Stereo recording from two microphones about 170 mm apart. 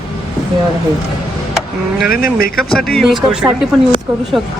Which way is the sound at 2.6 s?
5° left (ahead or behind).